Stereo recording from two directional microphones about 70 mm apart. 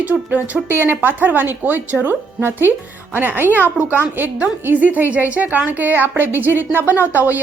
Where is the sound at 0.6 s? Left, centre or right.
Right.